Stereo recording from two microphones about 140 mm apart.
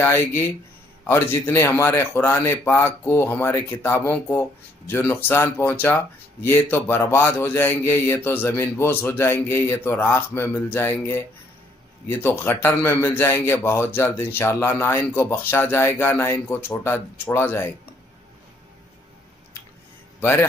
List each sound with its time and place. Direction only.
0.0 s a man's voice: 15° left (ahead or behind)
20.2 s a man's voice: 15° left (ahead or behind)